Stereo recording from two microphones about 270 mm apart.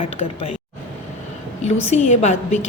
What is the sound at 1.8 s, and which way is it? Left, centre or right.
Speech, left.